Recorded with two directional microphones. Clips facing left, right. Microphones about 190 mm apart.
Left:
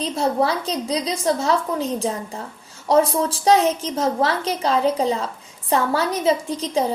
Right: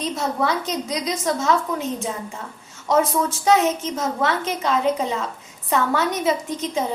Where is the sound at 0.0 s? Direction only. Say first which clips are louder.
Left 3 dB; 30° left (ahead or behind).